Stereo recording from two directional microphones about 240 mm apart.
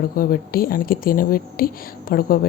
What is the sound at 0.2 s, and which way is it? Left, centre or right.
Speech, left.